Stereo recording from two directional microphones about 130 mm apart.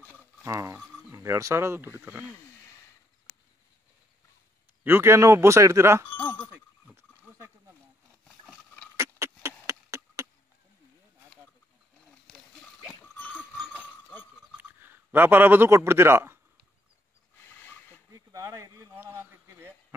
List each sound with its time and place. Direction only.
0.0 s a sound: 15° left (ahead or behind)
0.4 s speech: 25° right (ahead or behind)
4.8 s speech: 20° right (ahead or behind)
6.0 s wind chime: 15° left (ahead or behind)
7.0 s dog: 20° right (ahead or behind)
8.9 s a sound: 20° right (ahead or behind)
13.0 s goat: 15° left (ahead or behind)
14.6 s a man's voice: 15° right (ahead or behind)
18.1 s a sound: 25° right (ahead or behind)